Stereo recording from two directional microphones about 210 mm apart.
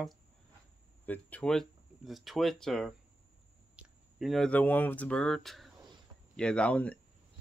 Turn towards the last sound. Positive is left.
turn(degrees=5)  # may be behind; listen again after turning